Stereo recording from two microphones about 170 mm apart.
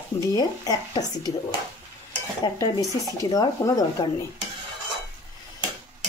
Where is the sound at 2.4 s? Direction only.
20° left (ahead or behind).